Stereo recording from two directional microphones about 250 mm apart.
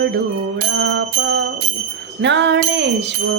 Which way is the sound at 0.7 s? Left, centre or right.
Right.